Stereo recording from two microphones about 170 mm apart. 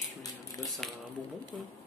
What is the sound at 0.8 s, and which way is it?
Speech, centre (ahead or behind).